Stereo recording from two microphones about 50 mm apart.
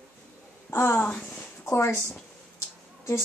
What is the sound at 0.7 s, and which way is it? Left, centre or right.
Speech, left.